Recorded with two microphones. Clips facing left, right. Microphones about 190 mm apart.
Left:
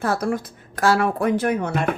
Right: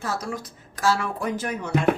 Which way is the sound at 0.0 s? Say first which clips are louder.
Left 7 dB; 55° left (ahead or behind).